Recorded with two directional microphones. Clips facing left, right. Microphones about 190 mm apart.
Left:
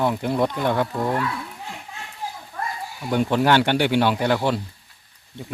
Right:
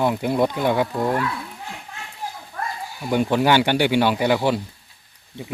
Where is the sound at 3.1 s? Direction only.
5° right (ahead or behind).